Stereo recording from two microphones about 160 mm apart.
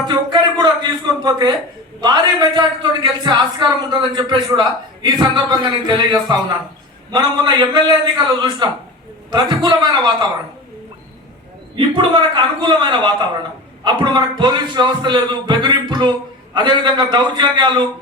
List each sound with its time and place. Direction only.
0.1 s a man's voice: 25° right (ahead or behind)
12.4 s a man's voice: 30° right (ahead or behind)